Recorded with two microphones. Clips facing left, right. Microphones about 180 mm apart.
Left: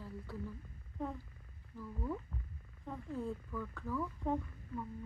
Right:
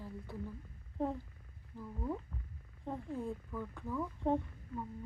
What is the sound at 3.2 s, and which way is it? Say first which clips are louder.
Speech: even; 20° right (ahead or behind).